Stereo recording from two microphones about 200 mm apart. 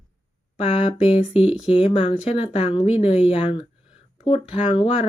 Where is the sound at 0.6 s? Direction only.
35° left (ahead or behind).